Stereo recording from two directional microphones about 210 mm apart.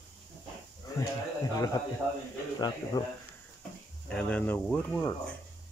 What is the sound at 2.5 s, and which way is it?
Speech, 20° left (ahead or behind).